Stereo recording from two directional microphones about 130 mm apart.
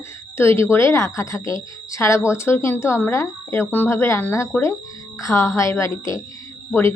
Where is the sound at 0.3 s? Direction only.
20° left (ahead or behind).